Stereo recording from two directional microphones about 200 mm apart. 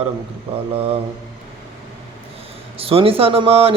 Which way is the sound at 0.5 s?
30° right (ahead or behind).